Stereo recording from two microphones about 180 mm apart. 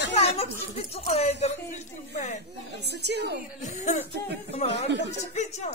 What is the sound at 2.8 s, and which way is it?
Speech, 70° right (ahead or behind).